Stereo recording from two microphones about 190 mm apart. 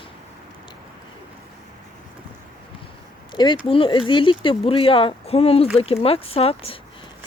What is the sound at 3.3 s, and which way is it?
Speech, 25° left (ahead or behind).